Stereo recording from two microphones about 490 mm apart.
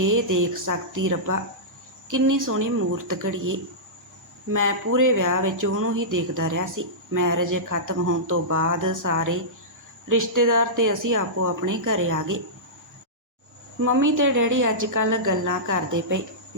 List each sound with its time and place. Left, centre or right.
0.0 s speech: right
13.8 s speech: right